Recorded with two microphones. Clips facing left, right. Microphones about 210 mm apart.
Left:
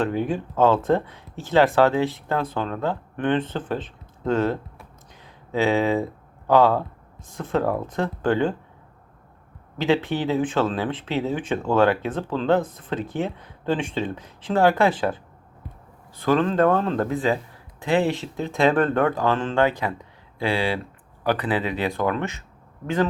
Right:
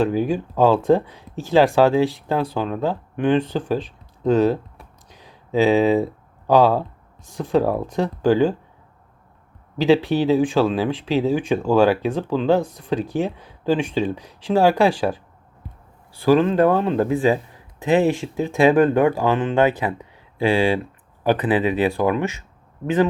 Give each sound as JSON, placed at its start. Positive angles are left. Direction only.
{"t": 0.3, "sound": "a man's voice", "side_deg": -15}
{"t": 10.2, "sound": "a man's voice", "side_deg": -15}
{"t": 16.2, "sound": "a man's voice", "side_deg": -10}